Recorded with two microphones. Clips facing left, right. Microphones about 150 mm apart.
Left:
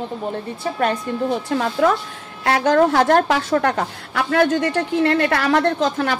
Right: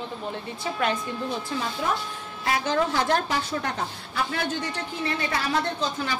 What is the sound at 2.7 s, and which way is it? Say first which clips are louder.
Speech: left 10 dB; 60° left (ahead or behind).